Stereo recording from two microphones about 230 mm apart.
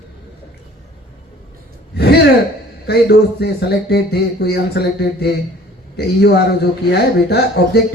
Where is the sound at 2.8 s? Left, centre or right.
Left.